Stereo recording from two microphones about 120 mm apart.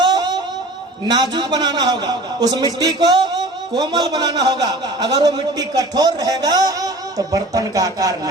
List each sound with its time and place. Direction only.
1.0 s a man's voice: 35° right (ahead or behind)